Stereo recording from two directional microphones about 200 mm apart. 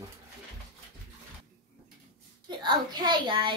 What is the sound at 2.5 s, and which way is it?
A child's voice, 20° right (ahead or behind).